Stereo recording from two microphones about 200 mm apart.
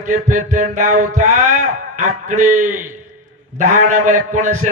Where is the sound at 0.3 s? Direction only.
40° right (ahead or behind).